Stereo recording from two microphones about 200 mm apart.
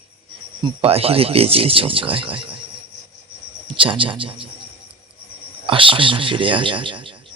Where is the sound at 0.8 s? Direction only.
30° right (ahead or behind).